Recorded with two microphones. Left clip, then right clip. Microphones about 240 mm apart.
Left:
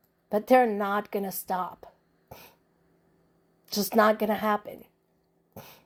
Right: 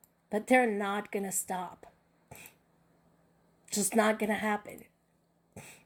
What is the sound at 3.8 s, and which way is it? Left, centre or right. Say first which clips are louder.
Speech: left 6 dB; left.